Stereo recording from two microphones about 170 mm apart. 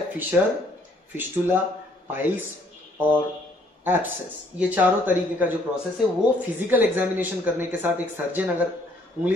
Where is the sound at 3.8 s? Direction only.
10° right (ahead or behind).